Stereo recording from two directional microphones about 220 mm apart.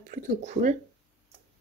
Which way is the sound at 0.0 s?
35° right (ahead or behind).